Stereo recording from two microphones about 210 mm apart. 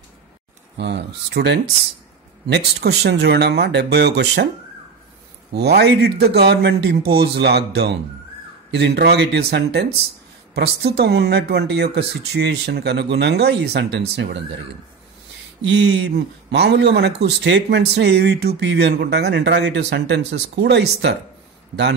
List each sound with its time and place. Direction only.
0.7 s speech: 55° right (ahead or behind)
5.5 s speech: 50° right (ahead or behind)
15.6 s speech: 55° right (ahead or behind)